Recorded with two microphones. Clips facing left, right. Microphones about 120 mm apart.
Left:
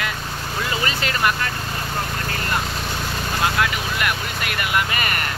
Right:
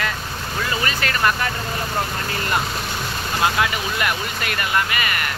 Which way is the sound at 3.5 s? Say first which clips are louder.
Right 1 dB; centre (ahead or behind).